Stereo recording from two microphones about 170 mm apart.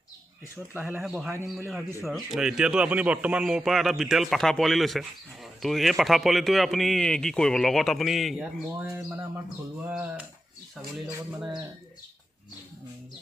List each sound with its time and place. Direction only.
0.7 s a man's voice: 5° right (ahead or behind)
8.7 s speech: 15° right (ahead or behind)
11.3 s a man's voice: 5° right (ahead or behind)